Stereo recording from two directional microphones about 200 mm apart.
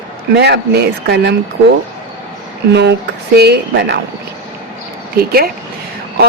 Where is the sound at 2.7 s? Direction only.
60° right (ahead or behind).